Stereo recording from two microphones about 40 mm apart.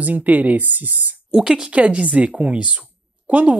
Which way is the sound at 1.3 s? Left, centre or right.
Right.